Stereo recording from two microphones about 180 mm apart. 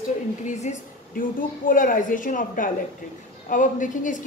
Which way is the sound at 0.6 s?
40° left (ahead or behind).